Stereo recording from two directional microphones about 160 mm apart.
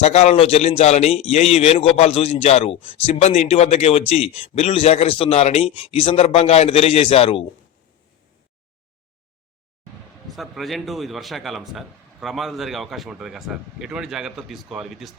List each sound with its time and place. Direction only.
0.0 s a man's voice: 40° left (ahead or behind)
10.2 s a man's voice: centre (ahead or behind)